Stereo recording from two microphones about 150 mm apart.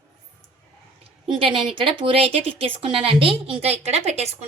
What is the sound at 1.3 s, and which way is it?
A woman's voice, 40° right (ahead or behind).